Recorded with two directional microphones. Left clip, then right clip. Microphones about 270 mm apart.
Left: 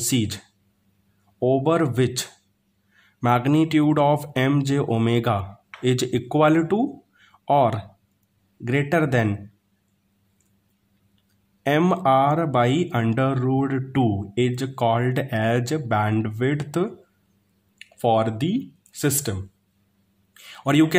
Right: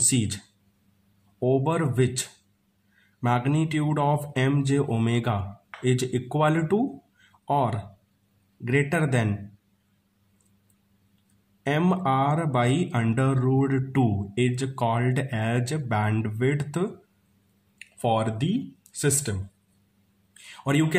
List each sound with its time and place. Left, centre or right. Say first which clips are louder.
0.0 s speech: left 2 dB; left
1.4 s speech: left 5 dB; left
11.6 s speech: left 5 dB; left
20.3 s a sound: left 6 dB; left